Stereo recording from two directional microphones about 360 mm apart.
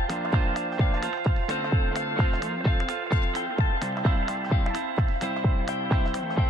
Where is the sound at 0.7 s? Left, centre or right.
Centre.